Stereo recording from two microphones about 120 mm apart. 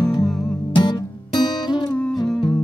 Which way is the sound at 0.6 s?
40° left (ahead or behind).